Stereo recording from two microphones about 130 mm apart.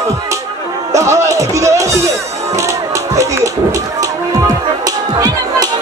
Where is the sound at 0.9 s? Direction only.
25° right (ahead or behind).